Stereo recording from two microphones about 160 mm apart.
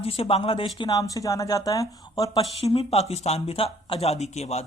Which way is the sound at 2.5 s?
35° left (ahead or behind).